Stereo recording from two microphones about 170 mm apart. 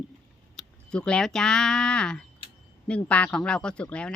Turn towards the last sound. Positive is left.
turn(degrees=5)  # may be behind; listen again after turning